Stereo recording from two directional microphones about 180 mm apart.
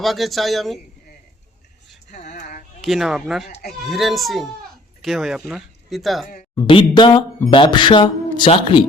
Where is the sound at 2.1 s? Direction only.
45° left (ahead or behind).